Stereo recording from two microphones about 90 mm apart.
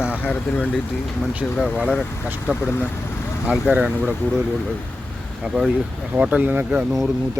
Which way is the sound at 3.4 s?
15° right (ahead or behind).